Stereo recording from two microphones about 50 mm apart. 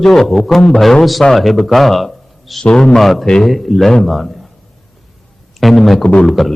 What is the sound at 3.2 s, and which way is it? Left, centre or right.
Speech, centre.